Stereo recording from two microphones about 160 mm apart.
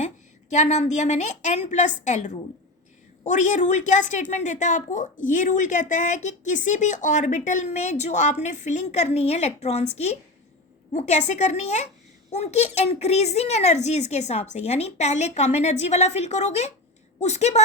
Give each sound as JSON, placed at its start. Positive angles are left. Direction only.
{"t": 0.5, "sound": "a woman's voice", "side_deg": 45}